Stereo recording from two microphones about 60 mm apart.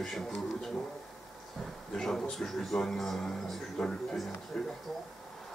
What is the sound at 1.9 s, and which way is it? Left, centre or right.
A man's voice, centre.